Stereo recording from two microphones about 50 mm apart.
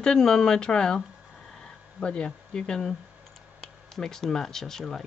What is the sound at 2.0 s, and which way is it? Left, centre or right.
Speech, left.